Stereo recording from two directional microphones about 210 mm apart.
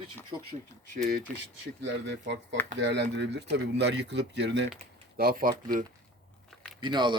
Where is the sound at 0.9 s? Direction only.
45° right (ahead or behind).